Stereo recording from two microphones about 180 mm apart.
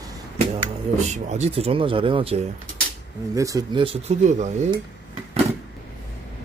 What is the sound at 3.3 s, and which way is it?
Speech, 20° right (ahead or behind).